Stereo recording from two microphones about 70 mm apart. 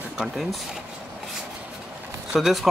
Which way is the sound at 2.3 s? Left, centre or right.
Centre.